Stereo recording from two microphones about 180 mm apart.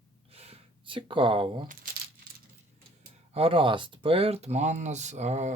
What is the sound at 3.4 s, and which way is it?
Speech, 30° right (ahead or behind).